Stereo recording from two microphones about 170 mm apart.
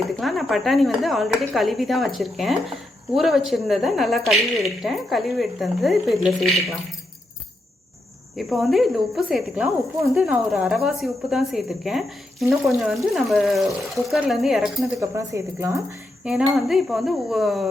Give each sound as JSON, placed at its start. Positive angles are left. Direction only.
{"t": 0.2, "sound": "a woman's voice", "side_deg": 0}
{"t": 8.4, "sound": "a woman's voice", "side_deg": 0}
{"t": 15.1, "sound": "speech", "side_deg": -15}
{"t": 16.2, "sound": "a woman's voice", "side_deg": 0}